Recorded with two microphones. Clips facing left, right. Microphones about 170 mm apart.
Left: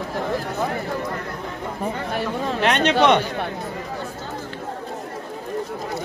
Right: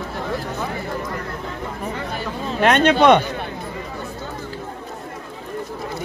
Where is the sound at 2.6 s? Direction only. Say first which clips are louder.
Right 5 dB; 50° right (ahead or behind).